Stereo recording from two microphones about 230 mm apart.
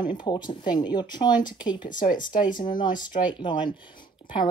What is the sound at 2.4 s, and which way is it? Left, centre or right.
Speech, left.